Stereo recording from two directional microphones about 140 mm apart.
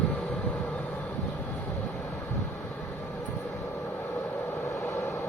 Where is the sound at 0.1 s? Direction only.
10° left (ahead or behind).